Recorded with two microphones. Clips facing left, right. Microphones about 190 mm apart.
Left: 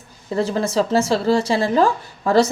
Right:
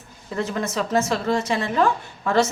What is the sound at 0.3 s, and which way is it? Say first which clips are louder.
Speech: left 6 dB; 30° left (ahead or behind).